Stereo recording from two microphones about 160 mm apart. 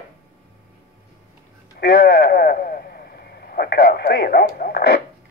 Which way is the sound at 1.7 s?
90° left.